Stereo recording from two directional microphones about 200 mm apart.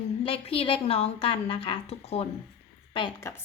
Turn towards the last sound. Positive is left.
turn(degrees=15)  # may be behind; listen again after turning